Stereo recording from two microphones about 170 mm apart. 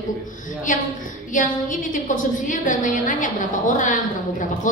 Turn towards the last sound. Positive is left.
turn(degrees=50)  # may be behind; listen again after turning